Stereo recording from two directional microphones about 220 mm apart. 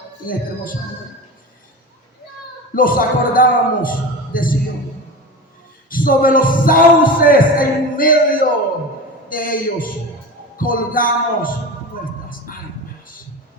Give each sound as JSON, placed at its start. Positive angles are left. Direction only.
{"t": 0.3, "sound": "speech", "side_deg": 40}
{"t": 2.7, "sound": "speech", "side_deg": 40}
{"t": 5.9, "sound": "speech", "side_deg": 40}
{"t": 12.5, "sound": "a sound", "side_deg": 40}